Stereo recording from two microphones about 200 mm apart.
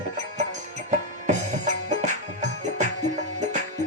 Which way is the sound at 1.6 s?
35° right (ahead or behind).